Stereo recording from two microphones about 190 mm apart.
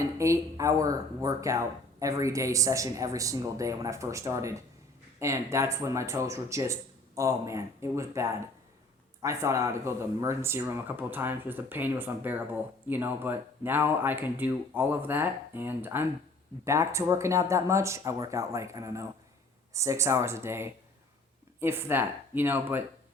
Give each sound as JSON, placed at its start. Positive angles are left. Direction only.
{"t": 0.2, "sound": "speech", "side_deg": -15}